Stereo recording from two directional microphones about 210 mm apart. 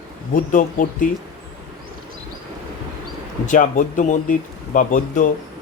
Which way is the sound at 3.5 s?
40° left (ahead or behind).